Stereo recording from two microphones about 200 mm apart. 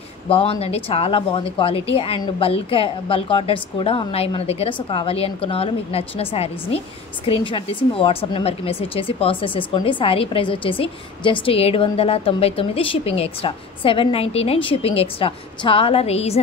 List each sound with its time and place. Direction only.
0.3 s speech: 30° left (ahead or behind)